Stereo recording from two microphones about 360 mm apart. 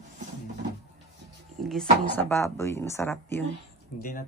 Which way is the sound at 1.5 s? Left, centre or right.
Centre.